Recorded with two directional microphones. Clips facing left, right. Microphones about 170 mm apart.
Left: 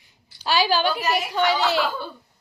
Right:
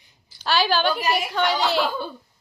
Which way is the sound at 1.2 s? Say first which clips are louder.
Left 1 dB; 10° left (ahead or behind).